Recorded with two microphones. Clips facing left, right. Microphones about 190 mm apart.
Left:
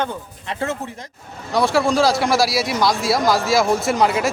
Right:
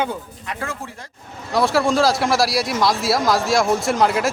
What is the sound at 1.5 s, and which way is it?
Speech, centre (ahead or behind).